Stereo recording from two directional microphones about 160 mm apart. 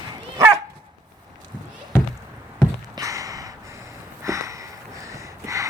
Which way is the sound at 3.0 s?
20° right (ahead or behind).